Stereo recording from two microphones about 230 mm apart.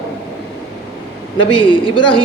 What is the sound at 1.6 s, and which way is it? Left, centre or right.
Speech, left.